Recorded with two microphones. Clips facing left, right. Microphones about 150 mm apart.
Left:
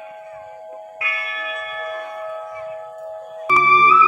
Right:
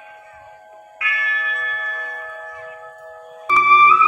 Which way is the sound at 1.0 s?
25° left (ahead or behind).